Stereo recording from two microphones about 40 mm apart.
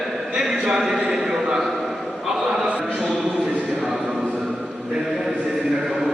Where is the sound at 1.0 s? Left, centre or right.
Right.